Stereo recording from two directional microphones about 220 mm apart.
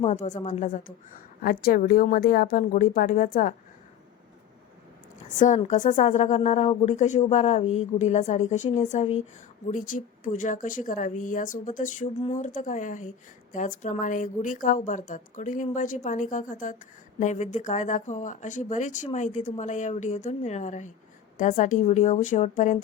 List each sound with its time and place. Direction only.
0.0 s speech: 30° left (ahead or behind)
5.4 s speech: 35° left (ahead or behind)